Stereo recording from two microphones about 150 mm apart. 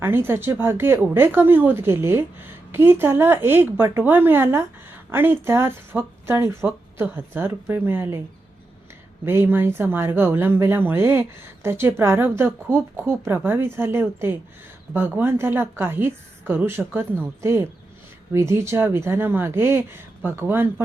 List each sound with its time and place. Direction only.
0.0 s speech: 15° right (ahead or behind)
9.2 s speech: 15° right (ahead or behind)